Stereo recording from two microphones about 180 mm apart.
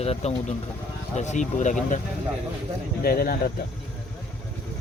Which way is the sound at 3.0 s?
55° left (ahead or behind).